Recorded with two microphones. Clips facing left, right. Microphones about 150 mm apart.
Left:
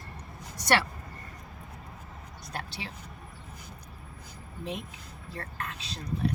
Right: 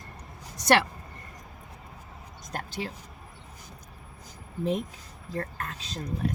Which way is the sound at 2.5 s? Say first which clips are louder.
Right 5 dB; 45° right (ahead or behind).